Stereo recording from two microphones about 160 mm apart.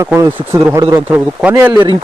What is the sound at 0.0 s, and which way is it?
Speech, 20° right (ahead or behind).